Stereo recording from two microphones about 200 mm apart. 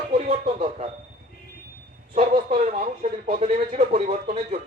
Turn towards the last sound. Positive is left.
turn(degrees=-30)  # may be behind; listen again after turning